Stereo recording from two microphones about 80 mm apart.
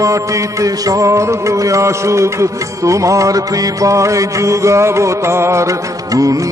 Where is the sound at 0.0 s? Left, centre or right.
Right.